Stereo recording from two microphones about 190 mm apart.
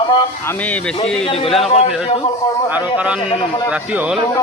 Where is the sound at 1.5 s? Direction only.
Centre (ahead or behind).